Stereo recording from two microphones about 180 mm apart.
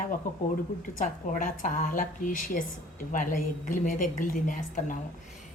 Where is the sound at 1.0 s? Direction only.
45° left (ahead or behind).